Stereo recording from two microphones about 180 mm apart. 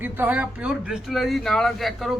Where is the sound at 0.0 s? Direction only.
10° right (ahead or behind).